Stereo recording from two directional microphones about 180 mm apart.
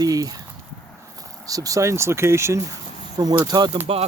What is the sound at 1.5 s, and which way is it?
Speech, 20° right (ahead or behind).